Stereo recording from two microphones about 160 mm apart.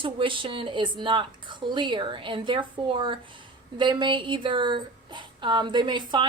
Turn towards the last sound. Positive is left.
turn(degrees=-30)  # may be behind; listen again after turning